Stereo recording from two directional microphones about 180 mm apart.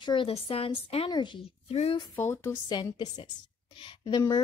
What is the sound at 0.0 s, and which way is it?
A woman's voice, 25° left (ahead or behind).